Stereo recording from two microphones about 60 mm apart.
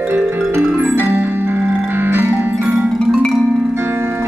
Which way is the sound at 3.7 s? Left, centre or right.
Right.